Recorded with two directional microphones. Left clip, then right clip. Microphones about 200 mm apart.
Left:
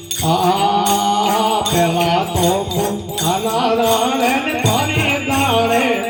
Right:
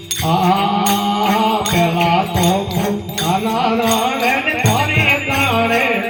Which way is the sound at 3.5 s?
20° left (ahead or behind).